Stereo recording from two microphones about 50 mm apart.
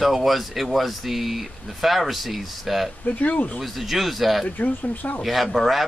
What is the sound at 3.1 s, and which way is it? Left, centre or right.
Speech, left.